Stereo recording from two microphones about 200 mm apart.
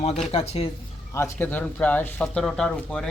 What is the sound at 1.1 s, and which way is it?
Speech, 10° left (ahead or behind).